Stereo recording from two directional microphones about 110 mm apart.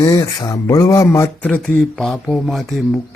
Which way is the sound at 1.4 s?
10° left (ahead or behind).